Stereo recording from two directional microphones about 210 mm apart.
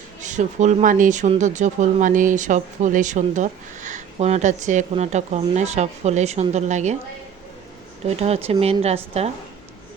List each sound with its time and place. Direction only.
0.2 s speech: 35° right (ahead or behind)
8.0 s speech: 30° right (ahead or behind)